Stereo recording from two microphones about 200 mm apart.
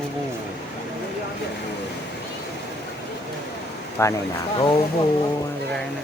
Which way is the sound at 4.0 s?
15° left (ahead or behind).